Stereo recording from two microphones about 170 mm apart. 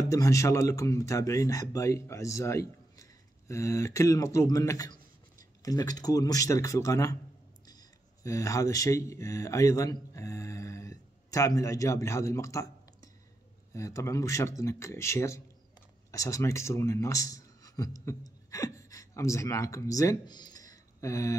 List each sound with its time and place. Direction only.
0.0 s speech: 20° left (ahead or behind)